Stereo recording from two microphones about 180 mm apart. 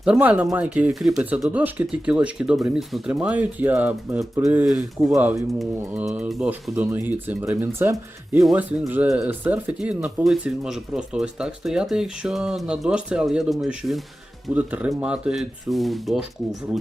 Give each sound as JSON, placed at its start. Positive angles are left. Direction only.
{"t": 0.0, "sound": "speech", "side_deg": -5}
{"t": 5.1, "sound": "speech", "side_deg": -15}
{"t": 8.4, "sound": "speech", "side_deg": -5}